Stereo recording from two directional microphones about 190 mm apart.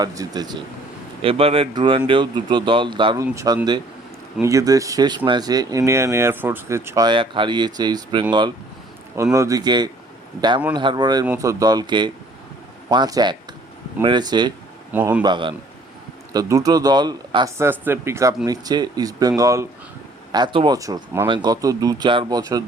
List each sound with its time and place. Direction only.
0.0 s speech: 20° right (ahead or behind)
14.9 s speech: 10° right (ahead or behind)
15.2 s speech: 25° right (ahead or behind)